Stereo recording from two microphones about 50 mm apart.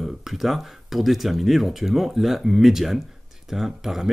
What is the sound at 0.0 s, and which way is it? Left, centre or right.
Speech, centre.